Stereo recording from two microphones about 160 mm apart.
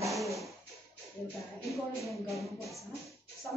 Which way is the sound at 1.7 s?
Centre (ahead or behind).